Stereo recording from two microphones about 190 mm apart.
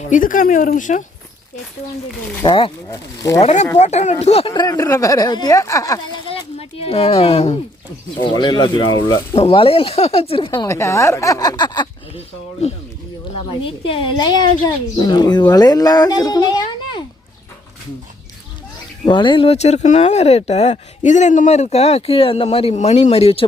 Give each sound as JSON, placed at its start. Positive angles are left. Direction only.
{"t": 0.0, "sound": "speech", "side_deg": 45}
{"t": 2.4, "sound": "speech", "side_deg": 25}
{"t": 3.4, "sound": "speech", "side_deg": 35}
{"t": 6.2, "sound": "speech", "side_deg": 30}
{"t": 10.7, "sound": "speech", "side_deg": 15}
{"t": 12.6, "sound": "speech", "side_deg": 35}
{"t": 19.0, "sound": "speech", "side_deg": 25}